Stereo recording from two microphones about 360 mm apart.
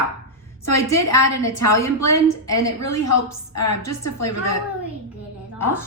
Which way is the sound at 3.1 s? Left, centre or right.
Left.